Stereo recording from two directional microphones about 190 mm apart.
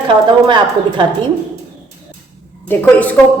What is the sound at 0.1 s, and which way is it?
Speech, 25° right (ahead or behind).